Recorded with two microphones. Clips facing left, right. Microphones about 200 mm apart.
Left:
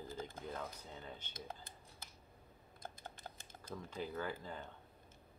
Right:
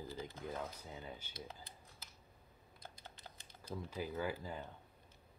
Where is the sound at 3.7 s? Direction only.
10° right (ahead or behind).